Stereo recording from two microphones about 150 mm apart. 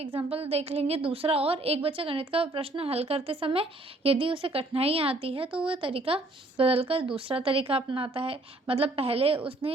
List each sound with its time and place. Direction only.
0.0 s a woman's voice: 40° right (ahead or behind)